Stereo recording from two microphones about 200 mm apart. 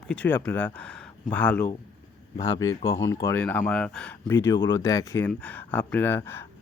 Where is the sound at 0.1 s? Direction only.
5° left (ahead or behind).